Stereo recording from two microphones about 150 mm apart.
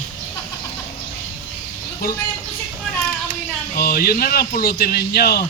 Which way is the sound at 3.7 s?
70° left (ahead or behind).